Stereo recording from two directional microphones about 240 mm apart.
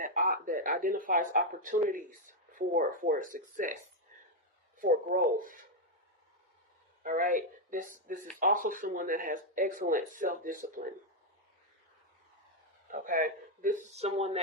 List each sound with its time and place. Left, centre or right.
0.0 s speech: right
4.8 s speech: right
7.0 s speech: right
12.9 s speech: right